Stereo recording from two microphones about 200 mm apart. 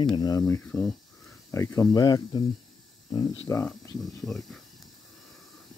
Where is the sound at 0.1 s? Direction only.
20° left (ahead or behind).